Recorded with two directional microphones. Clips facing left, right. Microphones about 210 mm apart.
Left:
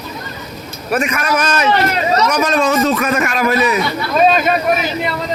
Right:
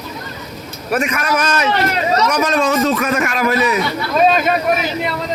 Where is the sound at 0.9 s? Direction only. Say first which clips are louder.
Left 1 dB; 40° left (ahead or behind).